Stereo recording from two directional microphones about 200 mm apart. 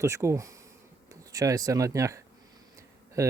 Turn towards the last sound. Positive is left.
turn(degrees=-15)  # may be behind; listen again after turning